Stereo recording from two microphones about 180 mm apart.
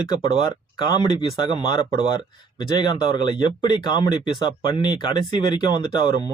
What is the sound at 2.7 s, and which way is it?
Speech, 25° left (ahead or behind).